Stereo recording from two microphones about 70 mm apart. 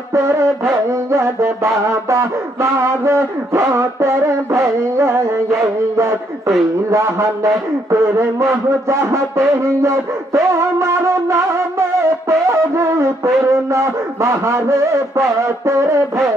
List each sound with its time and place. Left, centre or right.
0.1 s music: right
6.9 s a man's voice: right
12.0 s music: right